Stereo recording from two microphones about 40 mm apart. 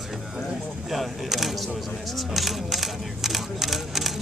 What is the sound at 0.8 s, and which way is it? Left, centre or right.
Speech, centre.